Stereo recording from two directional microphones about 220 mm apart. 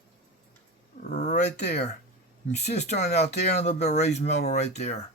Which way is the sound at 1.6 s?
30° left (ahead or behind).